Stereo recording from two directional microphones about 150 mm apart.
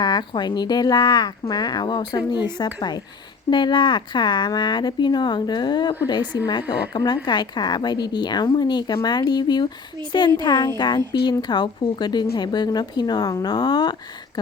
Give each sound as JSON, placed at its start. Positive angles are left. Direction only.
{"t": 0.0, "sound": "speech", "side_deg": 30}